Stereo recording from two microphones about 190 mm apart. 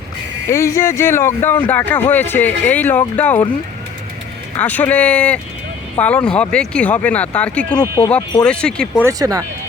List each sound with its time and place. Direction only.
0.4 s speech: 15° left (ahead or behind)
4.5 s speech: 10° left (ahead or behind)
7.8 s speech: 20° left (ahead or behind)
8.4 s speech: 5° left (ahead or behind)
9.0 s speech: 15° right (ahead or behind)